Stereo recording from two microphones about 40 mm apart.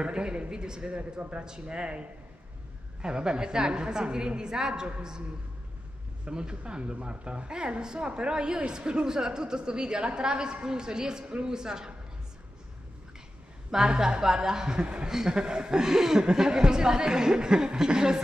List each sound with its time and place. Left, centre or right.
0.0 s a woman's voice: right
6.2 s a woman's voice: right
13.7 s a woman's voice: centre